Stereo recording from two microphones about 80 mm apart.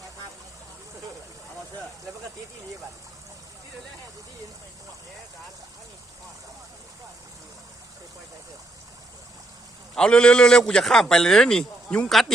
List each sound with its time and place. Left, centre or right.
9.9 s a man's voice: centre